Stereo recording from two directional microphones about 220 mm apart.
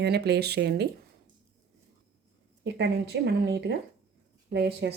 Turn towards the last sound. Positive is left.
turn(degrees=-50)  # may be behind; listen again after turning